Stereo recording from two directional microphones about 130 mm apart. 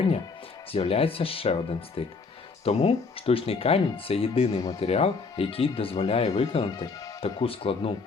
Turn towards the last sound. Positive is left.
turn(degrees=45)  # may be behind; listen again after turning